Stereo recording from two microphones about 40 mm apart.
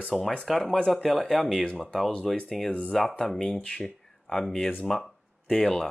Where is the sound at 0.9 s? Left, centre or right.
Centre.